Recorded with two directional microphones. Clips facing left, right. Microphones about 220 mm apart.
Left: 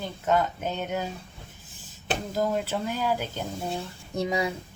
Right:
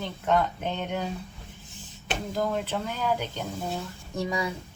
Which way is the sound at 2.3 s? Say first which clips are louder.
Left 1 dB; 5° left (ahead or behind).